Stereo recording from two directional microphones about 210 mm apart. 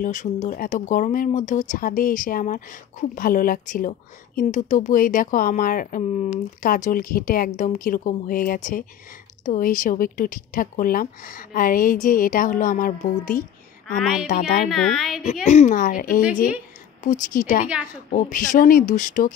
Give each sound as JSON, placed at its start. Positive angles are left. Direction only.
{"t": 0.0, "sound": "speech", "side_deg": 35}
{"t": 13.9, "sound": "a woman's voice", "side_deg": 0}
{"t": 14.2, "sound": "speech", "side_deg": 40}
{"t": 14.7, "sound": "a woman's voice", "side_deg": 0}
{"t": 15.4, "sound": "speech", "side_deg": 35}